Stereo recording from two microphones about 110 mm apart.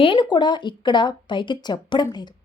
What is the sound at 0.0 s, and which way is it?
A woman's voice, 45° left (ahead or behind).